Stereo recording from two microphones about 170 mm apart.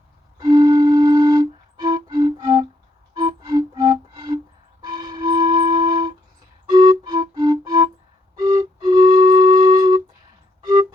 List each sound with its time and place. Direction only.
0.3 s music: 25° right (ahead or behind)
4.8 s flute: 25° right (ahead or behind)
6.7 s music: 25° right (ahead or behind)